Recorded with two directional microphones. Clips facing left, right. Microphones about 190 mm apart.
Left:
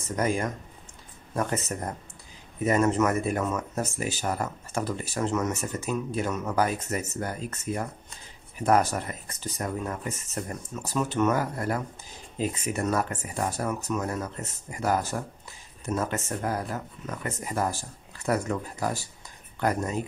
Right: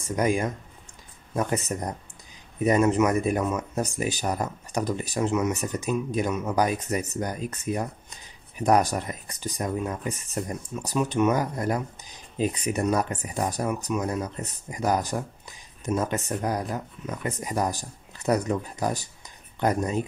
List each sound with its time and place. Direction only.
0.0 s speech: 15° right (ahead or behind)